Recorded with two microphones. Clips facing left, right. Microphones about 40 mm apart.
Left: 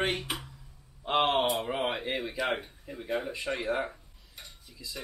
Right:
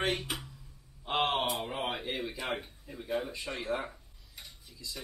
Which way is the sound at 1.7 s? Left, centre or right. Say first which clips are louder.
Left 4 dB; centre.